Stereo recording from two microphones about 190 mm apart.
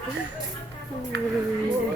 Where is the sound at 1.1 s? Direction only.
60° right (ahead or behind).